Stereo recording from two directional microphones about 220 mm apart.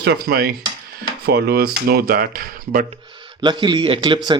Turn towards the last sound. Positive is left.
turn(degrees=-20)  # may be behind; listen again after turning